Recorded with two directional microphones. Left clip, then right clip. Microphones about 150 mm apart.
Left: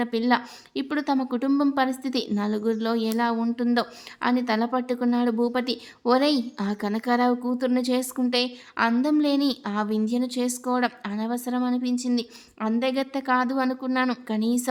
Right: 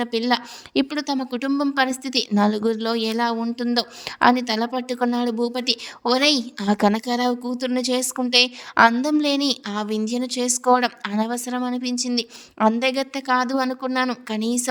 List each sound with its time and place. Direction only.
0.0 s a woman's voice: 50° right (ahead or behind)